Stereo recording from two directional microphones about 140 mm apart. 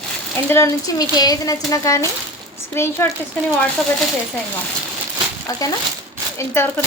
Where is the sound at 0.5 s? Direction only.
25° left (ahead or behind).